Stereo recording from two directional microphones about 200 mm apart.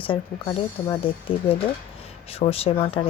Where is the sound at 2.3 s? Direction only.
30° left (ahead or behind).